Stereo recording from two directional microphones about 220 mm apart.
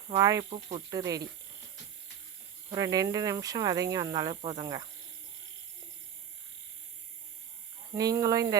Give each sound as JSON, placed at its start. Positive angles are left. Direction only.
{"t": 0.1, "sound": "speech", "side_deg": -15}
{"t": 2.7, "sound": "speech", "side_deg": -15}
{"t": 7.9, "sound": "speech", "side_deg": -15}